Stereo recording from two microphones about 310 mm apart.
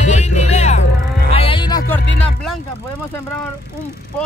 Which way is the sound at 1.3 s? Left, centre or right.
Centre.